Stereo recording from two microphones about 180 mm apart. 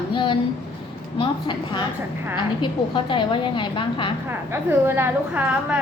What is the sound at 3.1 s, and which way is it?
A woman's voice, 25° left (ahead or behind).